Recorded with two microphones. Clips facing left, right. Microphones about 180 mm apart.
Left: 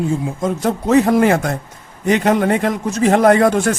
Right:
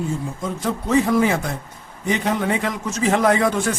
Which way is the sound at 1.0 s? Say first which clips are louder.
Left 5 dB; 60° left (ahead or behind).